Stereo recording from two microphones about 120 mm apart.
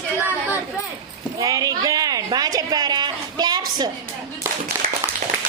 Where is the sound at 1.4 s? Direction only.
30° right (ahead or behind).